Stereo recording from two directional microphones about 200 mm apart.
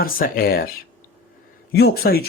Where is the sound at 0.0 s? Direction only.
45° left (ahead or behind).